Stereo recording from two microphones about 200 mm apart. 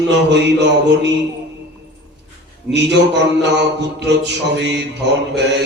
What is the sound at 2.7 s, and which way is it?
Mantra, 60° right (ahead or behind).